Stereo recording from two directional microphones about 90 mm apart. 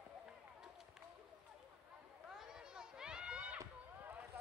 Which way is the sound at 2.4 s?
10° right (ahead or behind).